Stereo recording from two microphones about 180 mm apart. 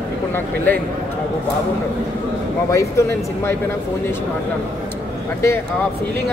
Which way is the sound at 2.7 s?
15° left (ahead or behind).